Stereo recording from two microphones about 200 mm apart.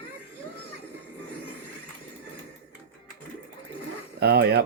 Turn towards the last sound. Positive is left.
turn(degrees=-50)  # may be behind; listen again after turning